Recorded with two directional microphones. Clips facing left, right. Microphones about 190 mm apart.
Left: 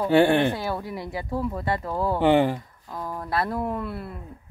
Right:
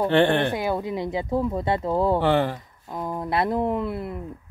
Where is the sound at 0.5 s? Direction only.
15° right (ahead or behind).